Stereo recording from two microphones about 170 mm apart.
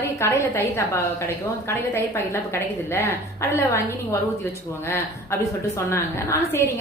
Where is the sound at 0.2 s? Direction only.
15° left (ahead or behind).